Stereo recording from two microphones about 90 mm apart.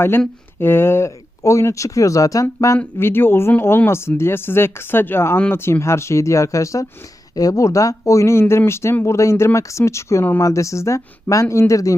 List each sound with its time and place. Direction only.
0.6 s speech: 25° left (ahead or behind)
2.7 s speech: 25° left (ahead or behind)